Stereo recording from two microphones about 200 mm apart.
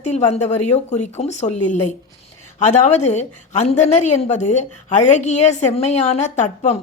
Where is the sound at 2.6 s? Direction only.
35° left (ahead or behind).